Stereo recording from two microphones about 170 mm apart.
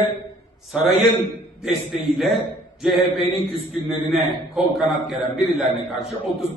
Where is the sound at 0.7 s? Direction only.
40° right (ahead or behind).